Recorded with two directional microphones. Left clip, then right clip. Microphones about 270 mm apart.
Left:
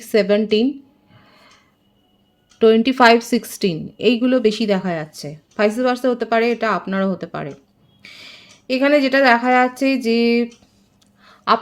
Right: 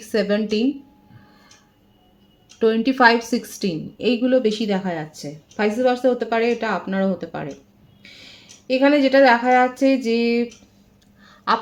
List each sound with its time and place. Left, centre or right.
0.0 s a woman's voice: left
2.6 s a woman's voice: left
11.2 s a sound: left